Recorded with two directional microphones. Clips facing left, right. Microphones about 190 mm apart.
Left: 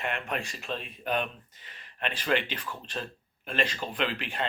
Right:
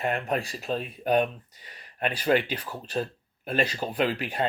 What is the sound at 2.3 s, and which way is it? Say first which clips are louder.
Speech: right 5 dB; 30° right (ahead or behind).